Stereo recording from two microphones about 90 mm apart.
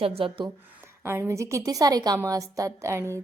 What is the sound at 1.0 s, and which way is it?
Speech, 25° right (ahead or behind).